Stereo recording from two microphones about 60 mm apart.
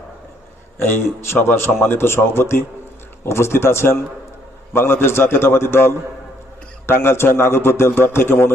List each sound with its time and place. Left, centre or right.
0.8 s a man's voice: left